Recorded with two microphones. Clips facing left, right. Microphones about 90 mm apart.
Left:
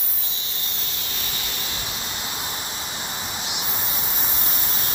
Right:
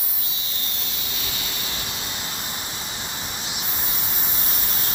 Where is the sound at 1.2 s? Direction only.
Centre (ahead or behind).